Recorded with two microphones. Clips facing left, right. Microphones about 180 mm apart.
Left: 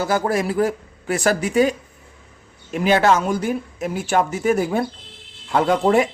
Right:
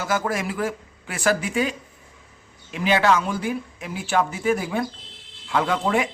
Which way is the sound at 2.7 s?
45° left (ahead or behind).